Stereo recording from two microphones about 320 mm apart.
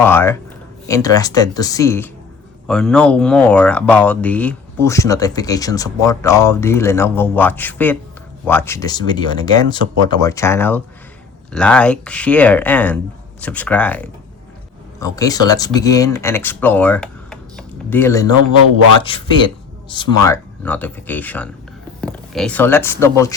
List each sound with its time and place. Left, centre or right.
0.0 s speech: centre